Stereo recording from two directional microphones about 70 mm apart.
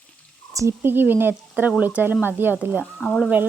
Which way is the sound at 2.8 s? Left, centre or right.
Centre.